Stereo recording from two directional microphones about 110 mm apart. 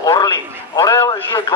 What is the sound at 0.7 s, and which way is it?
Speech, 35° left (ahead or behind).